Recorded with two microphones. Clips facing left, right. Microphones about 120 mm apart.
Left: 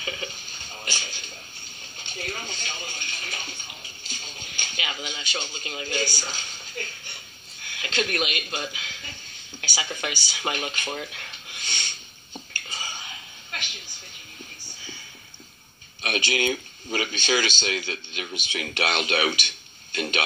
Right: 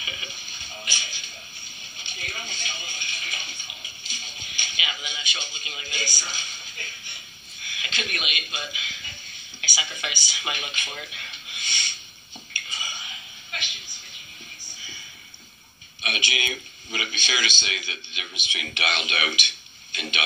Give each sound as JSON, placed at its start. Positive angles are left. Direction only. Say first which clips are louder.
{"t": 0.0, "sound": "a sound", "louder": "left 5 dB", "side_deg": 45}
{"t": 2.1, "sound": "television", "louder": "left 4 dB", "side_deg": 45}
{"t": 4.1, "sound": "music", "louder": "left 2 dB", "side_deg": 40}
{"t": 5.5, "sound": "speech", "louder": "left 7 dB", "side_deg": 40}
{"t": 12.5, "sound": "whispering", "louder": "even", "side_deg": 40}
{"t": 16.3, "sound": "speech", "louder": "left 6 dB", "side_deg": 40}